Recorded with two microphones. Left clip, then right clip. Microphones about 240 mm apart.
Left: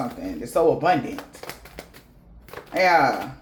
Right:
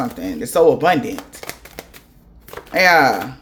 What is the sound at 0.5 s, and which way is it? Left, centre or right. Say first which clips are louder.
Speech: right 6 dB; right.